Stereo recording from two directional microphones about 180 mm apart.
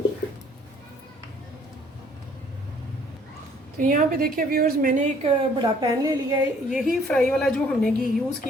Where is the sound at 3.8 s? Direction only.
50° right (ahead or behind).